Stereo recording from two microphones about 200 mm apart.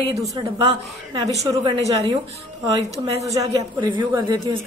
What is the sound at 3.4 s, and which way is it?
A woman's voice, 15° right (ahead or behind).